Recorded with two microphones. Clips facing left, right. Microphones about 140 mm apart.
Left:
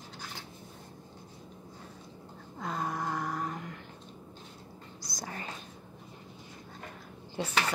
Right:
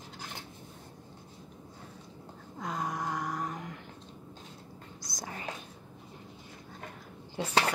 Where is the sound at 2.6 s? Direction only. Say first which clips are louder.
Left 1 dB; 15° right (ahead or behind).